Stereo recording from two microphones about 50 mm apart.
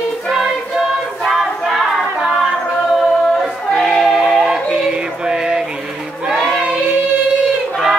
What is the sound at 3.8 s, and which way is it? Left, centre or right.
Music, centre.